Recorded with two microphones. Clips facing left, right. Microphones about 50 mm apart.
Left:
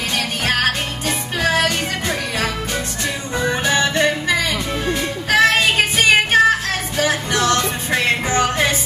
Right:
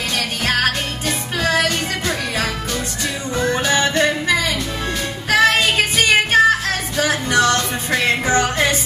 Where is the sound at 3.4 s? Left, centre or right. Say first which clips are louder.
Even; centre.